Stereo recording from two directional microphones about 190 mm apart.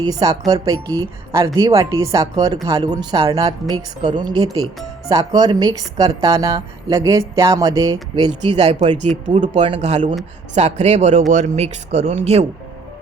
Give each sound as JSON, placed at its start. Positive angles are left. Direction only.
{"t": 0.0, "sound": "a woman's voice", "side_deg": -20}
{"t": 8.5, "sound": "speech", "side_deg": -35}